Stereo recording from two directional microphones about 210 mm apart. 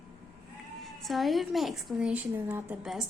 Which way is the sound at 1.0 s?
Centre (ahead or behind).